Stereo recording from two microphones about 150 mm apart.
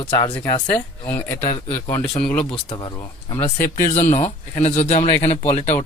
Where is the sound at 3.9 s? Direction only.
50° left (ahead or behind).